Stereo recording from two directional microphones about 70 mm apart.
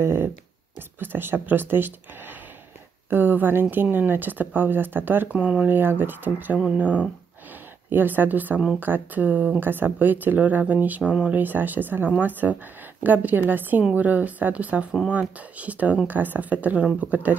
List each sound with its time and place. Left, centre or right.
0.0 s speech: right; by 5.8 s centre
5.8 s speech: right